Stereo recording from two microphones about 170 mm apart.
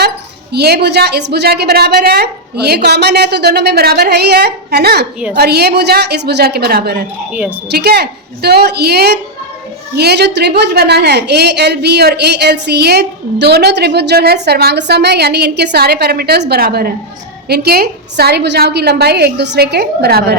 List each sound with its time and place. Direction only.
0.5 s a woman's voice: 75° right (ahead or behind)
7.3 s a woman's voice: 5° right (ahead or behind)
7.7 s a woman's voice: 70° right (ahead or behind)